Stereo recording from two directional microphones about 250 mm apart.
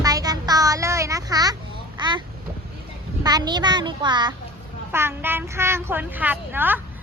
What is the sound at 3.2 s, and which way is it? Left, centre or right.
A woman's voice, centre.